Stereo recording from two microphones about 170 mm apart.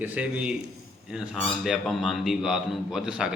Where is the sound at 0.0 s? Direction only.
10° right (ahead or behind).